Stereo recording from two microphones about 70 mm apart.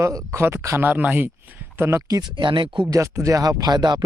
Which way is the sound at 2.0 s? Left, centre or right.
Right.